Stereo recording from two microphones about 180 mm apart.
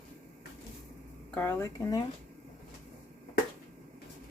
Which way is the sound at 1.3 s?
10° left (ahead or behind).